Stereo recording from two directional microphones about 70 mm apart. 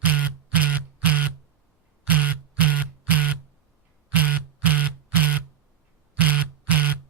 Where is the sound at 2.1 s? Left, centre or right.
Right.